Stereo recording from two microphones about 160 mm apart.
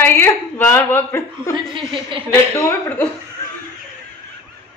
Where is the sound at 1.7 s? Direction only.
35° right (ahead or behind).